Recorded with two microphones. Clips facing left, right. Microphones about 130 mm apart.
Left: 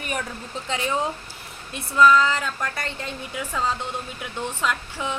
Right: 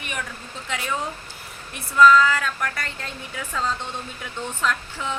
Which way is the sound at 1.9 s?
20° left (ahead or behind).